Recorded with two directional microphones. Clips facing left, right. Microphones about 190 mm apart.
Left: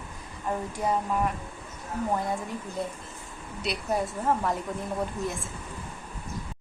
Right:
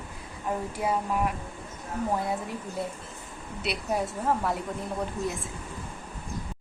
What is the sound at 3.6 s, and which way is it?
A woman's voice, centre (ahead or behind).